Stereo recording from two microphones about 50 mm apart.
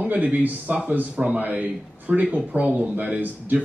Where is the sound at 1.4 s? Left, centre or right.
Right.